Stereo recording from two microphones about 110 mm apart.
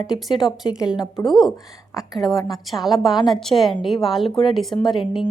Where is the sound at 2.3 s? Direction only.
35° left (ahead or behind).